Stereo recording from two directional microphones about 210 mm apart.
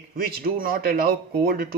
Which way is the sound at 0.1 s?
45° right (ahead or behind).